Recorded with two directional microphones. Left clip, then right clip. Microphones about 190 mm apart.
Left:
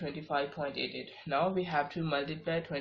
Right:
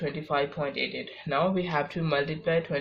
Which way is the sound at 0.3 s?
45° right (ahead or behind).